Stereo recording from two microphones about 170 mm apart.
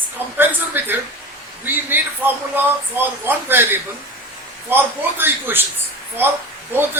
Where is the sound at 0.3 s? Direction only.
10° right (ahead or behind).